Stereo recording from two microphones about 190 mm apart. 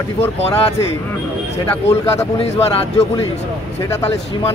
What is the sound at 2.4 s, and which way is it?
Speech, 30° left (ahead or behind).